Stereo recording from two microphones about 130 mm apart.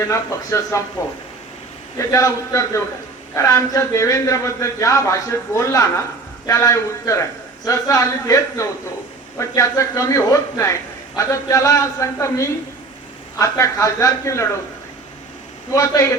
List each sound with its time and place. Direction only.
0.1 s a man's voice: 25° left (ahead or behind)
15.7 s a man's voice: 30° left (ahead or behind)